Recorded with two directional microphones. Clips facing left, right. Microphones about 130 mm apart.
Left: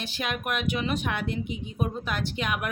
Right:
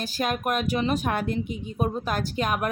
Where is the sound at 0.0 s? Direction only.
40° right (ahead or behind).